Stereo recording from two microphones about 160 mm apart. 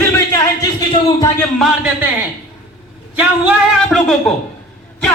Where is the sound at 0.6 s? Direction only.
20° left (ahead or behind).